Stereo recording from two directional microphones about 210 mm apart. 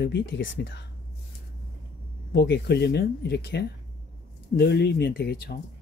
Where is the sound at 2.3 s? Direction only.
55° left (ahead or behind).